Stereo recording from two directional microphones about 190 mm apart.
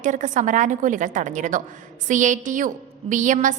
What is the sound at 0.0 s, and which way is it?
A woman's voice, 40° right (ahead or behind).